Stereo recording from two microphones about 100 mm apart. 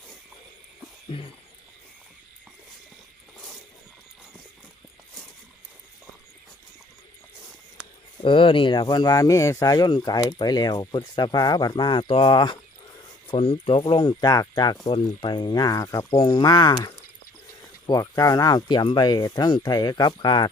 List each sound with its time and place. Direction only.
8.2 s speech: 60° left (ahead or behind)
13.3 s speech: 75° left (ahead or behind); by 16.1 s 30° left (ahead or behind)
16.1 s speech: 60° left (ahead or behind)
17.8 s speech: 45° left (ahead or behind)